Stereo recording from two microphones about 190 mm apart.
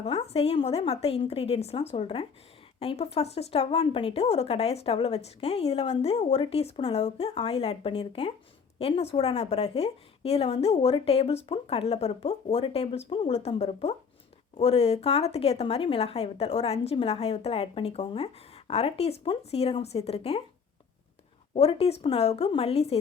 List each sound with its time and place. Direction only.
0.0 s speech: 35° left (ahead or behind)
21.5 s speech: 30° left (ahead or behind)